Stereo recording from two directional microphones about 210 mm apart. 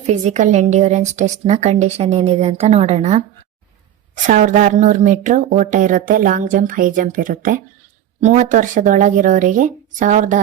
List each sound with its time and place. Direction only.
0.1 s a woman's voice: 35° right (ahead or behind)